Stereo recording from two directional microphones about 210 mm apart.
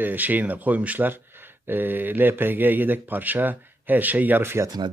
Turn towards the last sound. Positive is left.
turn(degrees=-10)  # may be behind; listen again after turning